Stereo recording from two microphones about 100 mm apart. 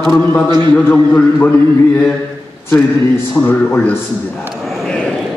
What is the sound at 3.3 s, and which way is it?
Speech, 30° left (ahead or behind).